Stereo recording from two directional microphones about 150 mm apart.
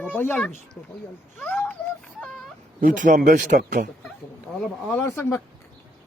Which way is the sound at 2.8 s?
65° right (ahead or behind).